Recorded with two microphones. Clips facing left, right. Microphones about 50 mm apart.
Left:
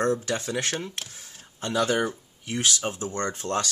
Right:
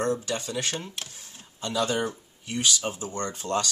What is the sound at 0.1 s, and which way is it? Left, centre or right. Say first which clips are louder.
Speech: left 2 dB; left.